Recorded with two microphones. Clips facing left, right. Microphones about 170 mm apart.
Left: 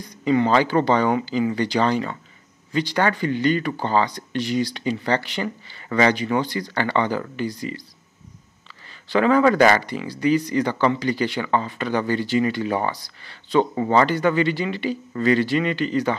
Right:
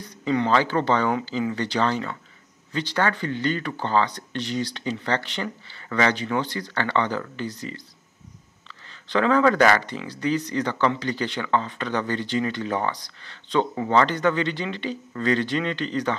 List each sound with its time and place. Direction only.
0.0 s speech: 10° left (ahead or behind)
8.8 s speech: 10° left (ahead or behind)